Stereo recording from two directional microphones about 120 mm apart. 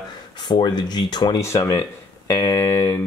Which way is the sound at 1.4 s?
25° left (ahead or behind).